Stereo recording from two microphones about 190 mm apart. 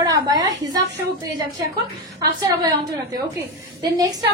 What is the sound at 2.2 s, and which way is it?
Speech, 20° right (ahead or behind).